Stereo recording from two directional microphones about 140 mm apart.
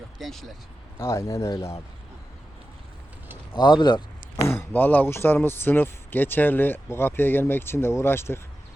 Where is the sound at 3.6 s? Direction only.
30° left (ahead or behind).